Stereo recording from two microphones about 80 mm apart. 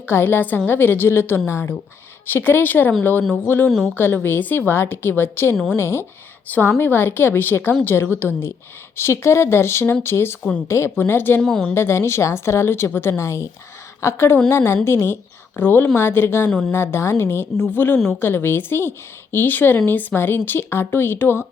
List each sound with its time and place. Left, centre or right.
0.1 s a woman's voice: left
11.4 s a woman's voice: centre
11.7 s a woman's voice: left
16.5 s a woman's voice: centre
16.7 s speech: left